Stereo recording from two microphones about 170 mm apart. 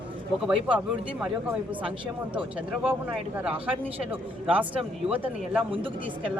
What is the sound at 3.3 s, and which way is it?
Speech, 10° right (ahead or behind).